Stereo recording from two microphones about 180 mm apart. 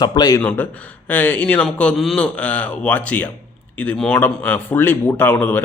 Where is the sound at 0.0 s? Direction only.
25° left (ahead or behind).